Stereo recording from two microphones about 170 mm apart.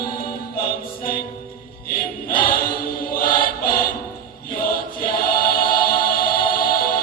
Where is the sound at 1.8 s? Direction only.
55° left (ahead or behind).